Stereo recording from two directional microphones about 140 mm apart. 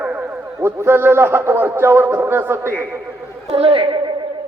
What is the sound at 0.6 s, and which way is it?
A man's voice, 15° right (ahead or behind).